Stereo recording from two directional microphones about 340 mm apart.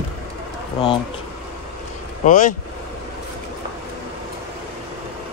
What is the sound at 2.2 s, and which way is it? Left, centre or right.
Speech, left.